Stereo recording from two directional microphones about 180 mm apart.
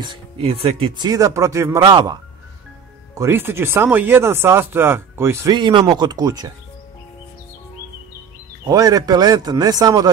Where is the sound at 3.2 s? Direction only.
10° right (ahead or behind).